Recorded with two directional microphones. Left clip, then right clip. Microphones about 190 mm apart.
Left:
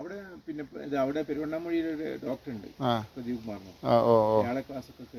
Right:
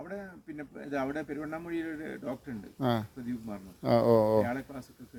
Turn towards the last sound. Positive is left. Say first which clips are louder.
# left 2 dB
turn(degrees=-15)  # may be behind; listen again after turning